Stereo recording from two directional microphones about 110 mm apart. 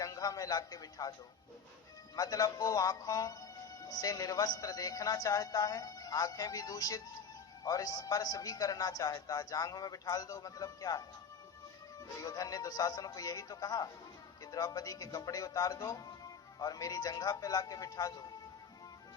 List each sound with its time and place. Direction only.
0.0 s speech: 35° left (ahead or behind)
2.1 s speech: 35° left (ahead or behind)
12.2 s speech: 35° left (ahead or behind)